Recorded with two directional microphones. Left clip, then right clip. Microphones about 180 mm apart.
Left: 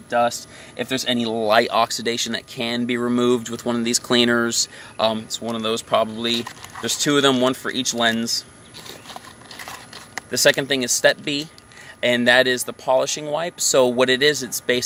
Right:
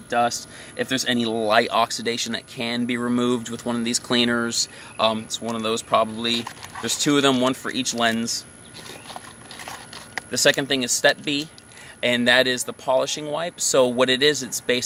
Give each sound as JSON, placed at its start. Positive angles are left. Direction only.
{"t": 0.1, "sound": "speech", "side_deg": 15}
{"t": 9.6, "sound": "a sound", "side_deg": 15}
{"t": 10.3, "sound": "speech", "side_deg": 25}